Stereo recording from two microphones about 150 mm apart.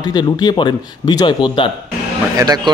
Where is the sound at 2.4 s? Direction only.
25° right (ahead or behind).